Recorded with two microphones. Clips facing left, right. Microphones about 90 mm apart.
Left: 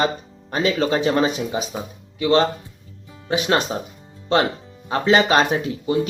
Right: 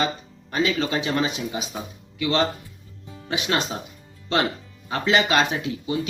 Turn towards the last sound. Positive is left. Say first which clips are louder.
# left 5 dB
turn(degrees=40)  # may be behind; listen again after turning